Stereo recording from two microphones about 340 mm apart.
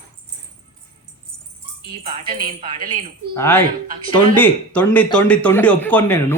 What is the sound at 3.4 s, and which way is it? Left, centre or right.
Speech, centre.